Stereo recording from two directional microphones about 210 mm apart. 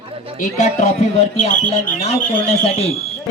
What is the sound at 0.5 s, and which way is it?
A man's voice, 35° left (ahead or behind).